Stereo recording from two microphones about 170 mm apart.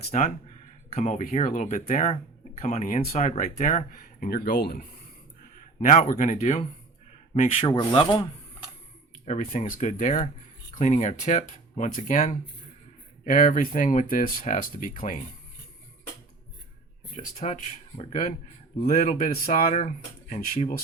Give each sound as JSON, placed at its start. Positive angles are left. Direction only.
{"t": 0.1, "sound": "speech", "side_deg": 50}
{"t": 5.8, "sound": "speech", "side_deg": 45}
{"t": 9.2, "sound": "speech", "side_deg": 45}
{"t": 17.2, "sound": "speech", "side_deg": 45}